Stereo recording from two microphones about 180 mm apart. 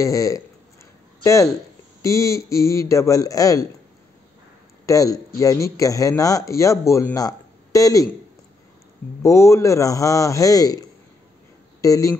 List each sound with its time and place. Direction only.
0.0 s speech: 20° left (ahead or behind)
4.8 s speech: 20° left (ahead or behind)
9.2 s speech: 15° left (ahead or behind)